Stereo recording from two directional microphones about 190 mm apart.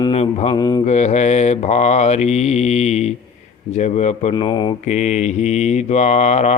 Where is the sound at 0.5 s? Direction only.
20° left (ahead or behind).